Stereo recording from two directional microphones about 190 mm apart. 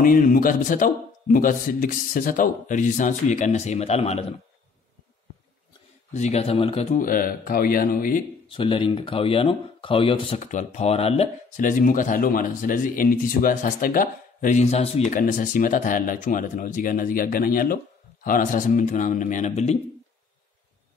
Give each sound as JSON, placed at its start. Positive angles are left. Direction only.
{"t": 0.0, "sound": "speech", "side_deg": 45}
{"t": 6.1, "sound": "speech", "side_deg": 35}
{"t": 8.5, "sound": "speech", "side_deg": 25}